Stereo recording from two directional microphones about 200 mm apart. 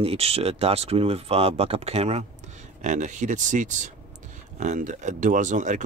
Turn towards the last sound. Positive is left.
turn(degrees=-40)  # may be behind; listen again after turning